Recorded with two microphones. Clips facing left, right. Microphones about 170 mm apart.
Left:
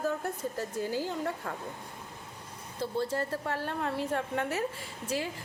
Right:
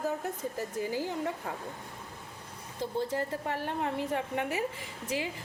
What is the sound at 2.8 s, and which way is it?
Speech, 15° right (ahead or behind).